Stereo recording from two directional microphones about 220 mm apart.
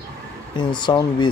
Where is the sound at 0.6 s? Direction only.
20° left (ahead or behind).